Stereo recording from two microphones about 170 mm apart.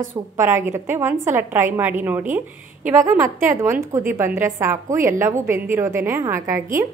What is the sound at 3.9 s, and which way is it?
A woman's voice, 15° right (ahead or behind).